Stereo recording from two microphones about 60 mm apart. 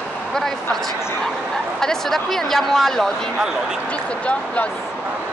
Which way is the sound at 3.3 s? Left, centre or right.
Centre.